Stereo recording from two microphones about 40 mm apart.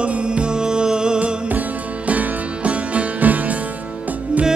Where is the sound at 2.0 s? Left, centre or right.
Right.